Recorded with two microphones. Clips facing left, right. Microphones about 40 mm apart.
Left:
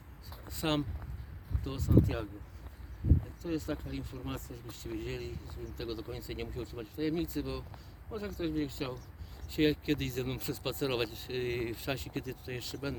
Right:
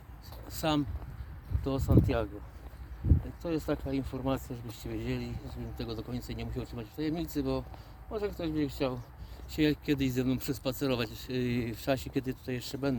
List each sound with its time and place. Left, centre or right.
0.4 s a sound: centre
1.6 s speech: centre
2.0 s speech: right
3.5 s speech: right
4.4 s speech: right
4.7 s speech: centre
6.5 s speech: centre
8.1 s speech: centre
9.5 s speech: centre
10.5 s speech: centre